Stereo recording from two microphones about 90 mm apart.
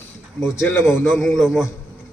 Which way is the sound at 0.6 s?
25° left (ahead or behind).